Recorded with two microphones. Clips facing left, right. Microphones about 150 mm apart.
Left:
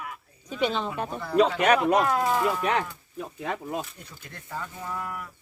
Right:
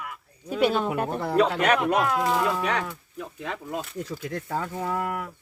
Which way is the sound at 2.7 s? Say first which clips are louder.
Left 1 dB; 20° left (ahead or behind).